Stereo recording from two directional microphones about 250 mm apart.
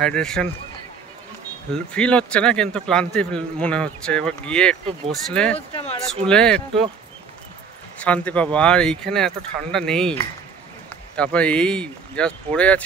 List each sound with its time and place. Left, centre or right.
0.0 s a man's voice: centre
1.9 s a man's voice: centre
5.7 s a sound: left
6.2 s a man's voice: centre
8.0 s a man's voice: centre